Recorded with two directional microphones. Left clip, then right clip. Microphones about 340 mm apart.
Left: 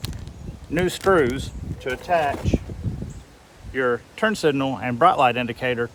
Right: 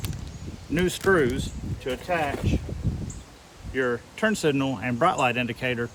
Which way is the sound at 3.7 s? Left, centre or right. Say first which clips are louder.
Left 4 dB; centre.